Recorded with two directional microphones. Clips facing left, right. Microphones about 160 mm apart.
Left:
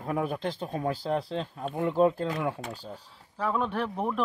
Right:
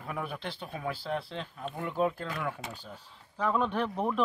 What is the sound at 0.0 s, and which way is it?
Speech, 35° left (ahead or behind).